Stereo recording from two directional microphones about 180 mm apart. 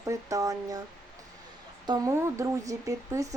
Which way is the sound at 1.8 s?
20° right (ahead or behind).